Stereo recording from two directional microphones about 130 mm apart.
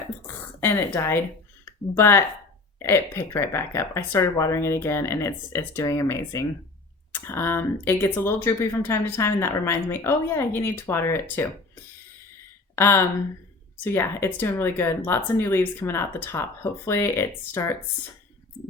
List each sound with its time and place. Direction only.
0.6 s speech: 15° left (ahead or behind)
12.7 s speech: 20° left (ahead or behind)